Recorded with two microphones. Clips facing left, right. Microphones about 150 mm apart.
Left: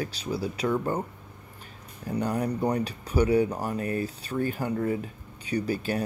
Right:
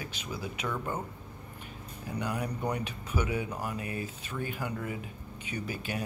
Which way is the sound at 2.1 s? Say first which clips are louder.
Left 7 dB; 35° left (ahead or behind).